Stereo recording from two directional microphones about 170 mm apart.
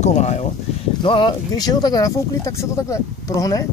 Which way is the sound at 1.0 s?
30° left (ahead or behind).